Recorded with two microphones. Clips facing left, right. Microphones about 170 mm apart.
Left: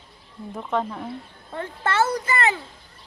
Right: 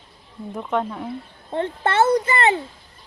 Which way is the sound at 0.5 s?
Centre (ahead or behind).